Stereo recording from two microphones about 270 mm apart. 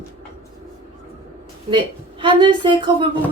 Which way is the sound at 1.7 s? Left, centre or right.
Centre.